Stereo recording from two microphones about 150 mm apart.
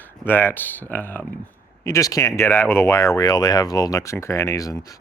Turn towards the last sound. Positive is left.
turn(degrees=25)  # may be behind; listen again after turning